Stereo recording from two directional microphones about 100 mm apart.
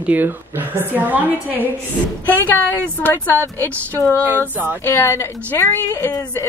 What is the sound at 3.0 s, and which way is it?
Speech, 15° left (ahead or behind).